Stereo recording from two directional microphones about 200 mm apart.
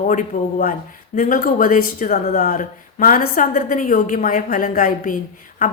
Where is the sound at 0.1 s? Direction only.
40° left (ahead or behind).